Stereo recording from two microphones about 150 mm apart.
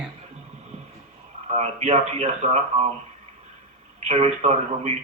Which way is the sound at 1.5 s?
45° right (ahead or behind).